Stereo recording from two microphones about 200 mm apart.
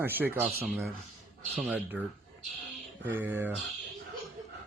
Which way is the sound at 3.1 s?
10° right (ahead or behind).